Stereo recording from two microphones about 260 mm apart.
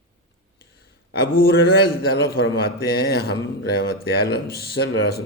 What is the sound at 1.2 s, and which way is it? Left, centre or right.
Speech, left.